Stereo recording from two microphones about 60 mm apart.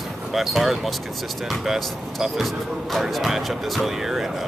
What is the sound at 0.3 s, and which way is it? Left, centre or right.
Speech, centre.